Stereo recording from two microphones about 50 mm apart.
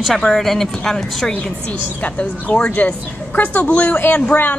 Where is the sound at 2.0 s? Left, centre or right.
Left.